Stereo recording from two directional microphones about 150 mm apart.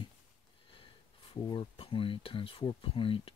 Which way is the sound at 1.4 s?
35° left (ahead or behind).